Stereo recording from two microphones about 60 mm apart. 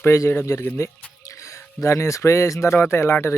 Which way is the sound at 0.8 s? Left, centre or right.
Left.